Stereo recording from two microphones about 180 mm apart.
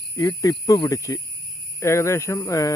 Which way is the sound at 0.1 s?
15° left (ahead or behind).